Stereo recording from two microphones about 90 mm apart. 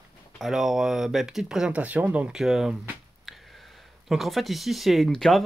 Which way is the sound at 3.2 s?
Centre (ahead or behind).